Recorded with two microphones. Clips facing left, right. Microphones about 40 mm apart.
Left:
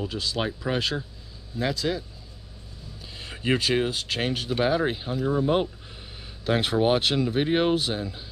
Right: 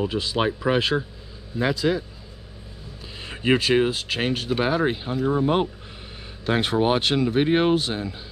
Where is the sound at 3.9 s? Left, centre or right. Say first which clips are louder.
Right 2 dB; centre.